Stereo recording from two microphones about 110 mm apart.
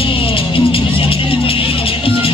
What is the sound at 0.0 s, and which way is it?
Music, 55° left (ahead or behind).